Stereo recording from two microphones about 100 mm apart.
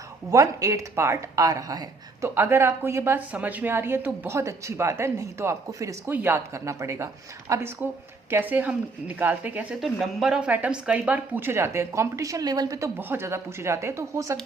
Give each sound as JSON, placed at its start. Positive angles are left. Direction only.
{"t": 0.3, "sound": "speech", "side_deg": -35}
{"t": 2.3, "sound": "a woman's voice", "side_deg": -25}
{"t": 6.1, "sound": "a woman's voice", "side_deg": -20}
{"t": 9.8, "sound": "a woman's voice", "side_deg": 0}
{"t": 13.0, "sound": "a woman's voice", "side_deg": -25}